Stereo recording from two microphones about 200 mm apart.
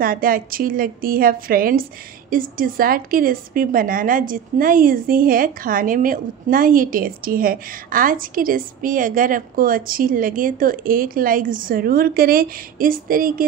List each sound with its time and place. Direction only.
0.0 s a woman's voice: 45° right (ahead or behind)